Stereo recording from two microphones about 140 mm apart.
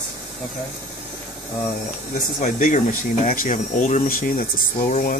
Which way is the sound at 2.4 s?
65° left (ahead or behind).